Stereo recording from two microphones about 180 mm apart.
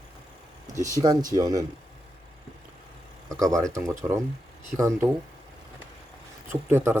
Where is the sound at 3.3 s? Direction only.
20° right (ahead or behind).